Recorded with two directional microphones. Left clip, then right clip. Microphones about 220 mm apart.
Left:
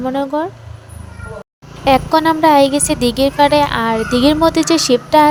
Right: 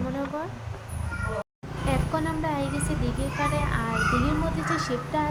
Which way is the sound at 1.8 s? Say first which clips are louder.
Left 17 dB; 45° left (ahead or behind).